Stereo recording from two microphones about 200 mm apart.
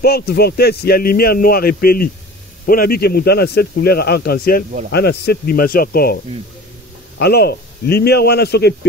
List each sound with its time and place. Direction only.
0.0 s speech: 50° left (ahead or behind)
7.2 s speech: 55° left (ahead or behind)